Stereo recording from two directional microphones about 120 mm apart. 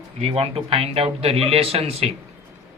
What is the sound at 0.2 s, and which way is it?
A man's voice, 55° right (ahead or behind).